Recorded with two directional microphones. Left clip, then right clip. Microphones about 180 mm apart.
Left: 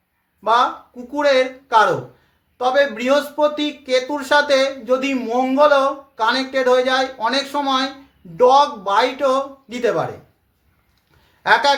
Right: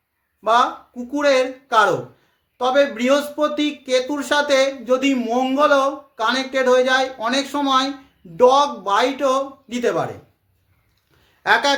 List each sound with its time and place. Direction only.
0.4 s speech: 15° right (ahead or behind)
11.4 s speech: 10° right (ahead or behind)